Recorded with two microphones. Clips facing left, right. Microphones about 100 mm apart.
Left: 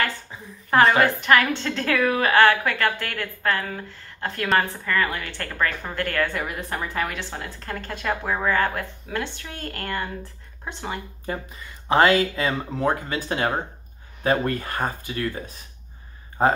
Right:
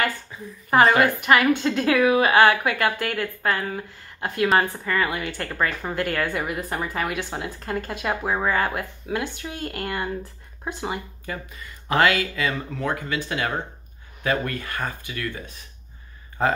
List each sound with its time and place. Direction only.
0.7 s a woman's voice: 5° right (ahead or behind)
11.2 s speech: 30° left (ahead or behind)